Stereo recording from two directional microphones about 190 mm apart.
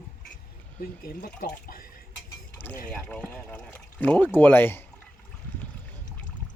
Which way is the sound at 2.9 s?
5° left (ahead or behind).